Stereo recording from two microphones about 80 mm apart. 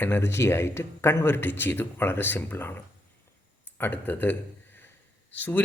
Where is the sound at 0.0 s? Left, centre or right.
Left.